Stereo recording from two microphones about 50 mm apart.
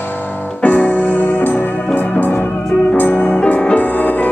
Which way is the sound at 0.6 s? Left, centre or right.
Left.